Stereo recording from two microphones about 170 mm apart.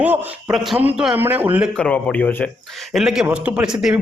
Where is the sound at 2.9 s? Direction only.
Centre (ahead or behind).